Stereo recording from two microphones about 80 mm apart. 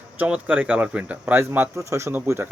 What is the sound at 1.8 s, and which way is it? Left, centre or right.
Speech, right.